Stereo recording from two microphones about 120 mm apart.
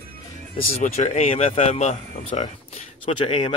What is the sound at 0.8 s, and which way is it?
Speech, 80° left.